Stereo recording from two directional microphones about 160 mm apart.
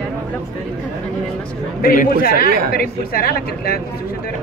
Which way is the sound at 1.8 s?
65° left (ahead or behind).